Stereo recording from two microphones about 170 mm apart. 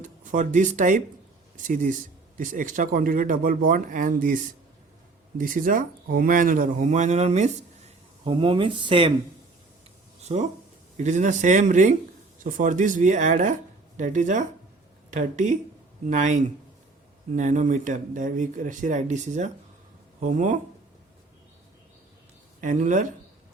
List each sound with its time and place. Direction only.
0.0 s speech: 50° right (ahead or behind)
5.4 s speech: 55° right (ahead or behind)
8.2 s speech: 30° right (ahead or behind)
10.3 s speech: 40° right (ahead or behind)
22.6 s speech: 50° right (ahead or behind)